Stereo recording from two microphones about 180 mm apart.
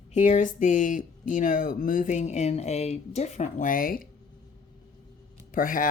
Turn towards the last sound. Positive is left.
turn(degrees=50)  # may be behind; listen again after turning